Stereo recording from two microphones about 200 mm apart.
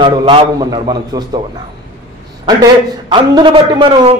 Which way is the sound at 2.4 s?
20° right (ahead or behind).